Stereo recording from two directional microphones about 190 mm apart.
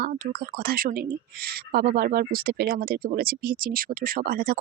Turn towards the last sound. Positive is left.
turn(degrees=-55)  # may be behind; listen again after turning